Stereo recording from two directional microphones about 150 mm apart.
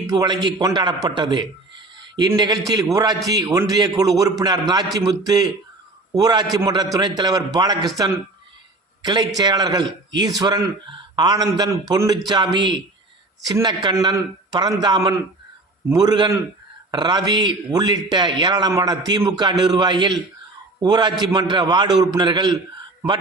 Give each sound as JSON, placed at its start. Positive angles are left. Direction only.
{"t": 0.1, "sound": "a man's voice", "side_deg": -25}
{"t": 9.0, "sound": "a sound", "side_deg": -30}
{"t": 9.4, "sound": "a man's voice", "side_deg": -30}